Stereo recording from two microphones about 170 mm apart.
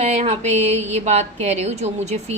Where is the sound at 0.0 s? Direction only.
40° right (ahead or behind).